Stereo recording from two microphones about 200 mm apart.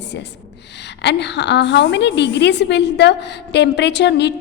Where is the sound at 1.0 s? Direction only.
60° left (ahead or behind).